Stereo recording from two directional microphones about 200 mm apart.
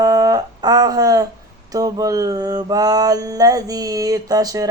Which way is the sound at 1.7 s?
15° right (ahead or behind).